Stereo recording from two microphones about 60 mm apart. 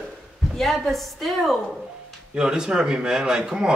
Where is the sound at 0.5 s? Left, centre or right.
Centre.